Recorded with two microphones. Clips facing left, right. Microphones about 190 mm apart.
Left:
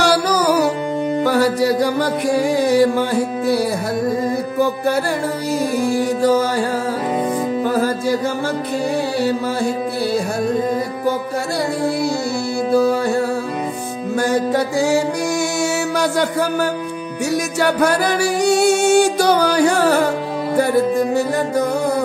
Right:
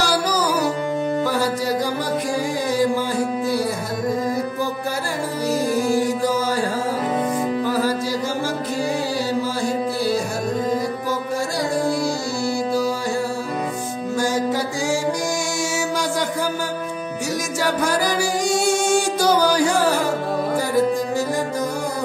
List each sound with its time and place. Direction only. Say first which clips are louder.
0.0 s music: left 5 dB; 65° left (ahead or behind)
7.6 s music: left 3 dB; 55° left (ahead or behind)
14.1 s music: left 4 dB; 60° left (ahead or behind)
17.6 s music: left 4 dB; 65° left (ahead or behind)